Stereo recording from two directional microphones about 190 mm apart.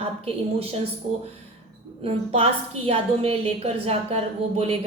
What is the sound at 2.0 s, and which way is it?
A woman's voice, 30° right (ahead or behind).